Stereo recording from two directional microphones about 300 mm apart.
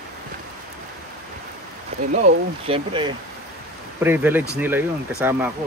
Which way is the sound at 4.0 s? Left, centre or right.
Centre.